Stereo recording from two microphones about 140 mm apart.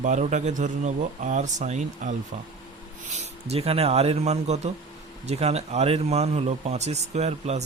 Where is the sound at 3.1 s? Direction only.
45° right (ahead or behind).